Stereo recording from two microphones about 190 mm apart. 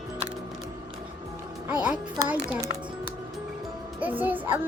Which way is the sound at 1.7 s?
5° right (ahead or behind).